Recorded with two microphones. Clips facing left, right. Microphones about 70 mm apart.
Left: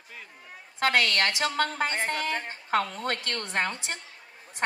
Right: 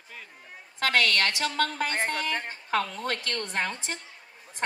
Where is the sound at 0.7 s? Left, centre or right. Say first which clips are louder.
Even; left.